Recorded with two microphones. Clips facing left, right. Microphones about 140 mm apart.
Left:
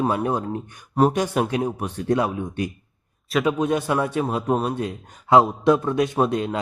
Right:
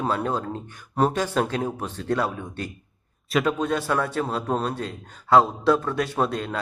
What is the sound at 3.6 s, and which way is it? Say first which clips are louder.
A man's voice: left 3 dB; 15° left (ahead or behind).